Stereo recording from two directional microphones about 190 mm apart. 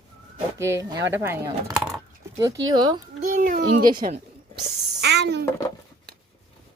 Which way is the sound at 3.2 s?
45° right (ahead or behind).